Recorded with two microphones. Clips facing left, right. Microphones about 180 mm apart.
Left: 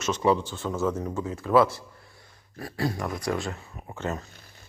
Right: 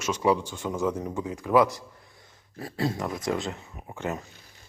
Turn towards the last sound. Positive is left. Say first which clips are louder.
# even
turn(degrees=-15)  # may be behind; listen again after turning